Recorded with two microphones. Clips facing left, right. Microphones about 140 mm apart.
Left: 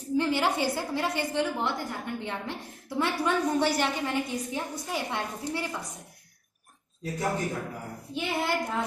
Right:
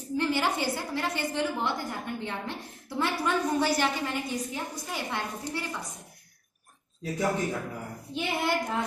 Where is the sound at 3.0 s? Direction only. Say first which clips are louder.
Left 1 dB; 5° left (ahead or behind).